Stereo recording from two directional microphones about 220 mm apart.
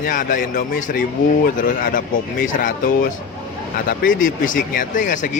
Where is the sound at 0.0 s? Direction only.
35° left (ahead or behind).